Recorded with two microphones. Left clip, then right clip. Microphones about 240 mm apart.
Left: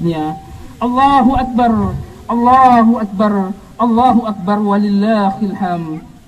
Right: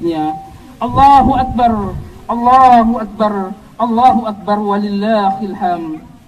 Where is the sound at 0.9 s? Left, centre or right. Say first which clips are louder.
Right 4 dB; left.